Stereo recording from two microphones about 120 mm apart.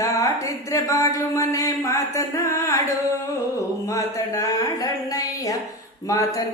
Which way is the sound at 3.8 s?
25° left (ahead or behind).